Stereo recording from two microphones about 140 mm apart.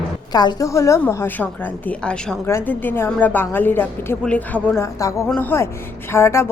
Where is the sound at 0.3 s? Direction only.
25° left (ahead or behind).